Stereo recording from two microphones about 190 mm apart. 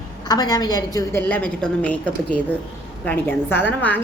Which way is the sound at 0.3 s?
20° left (ahead or behind).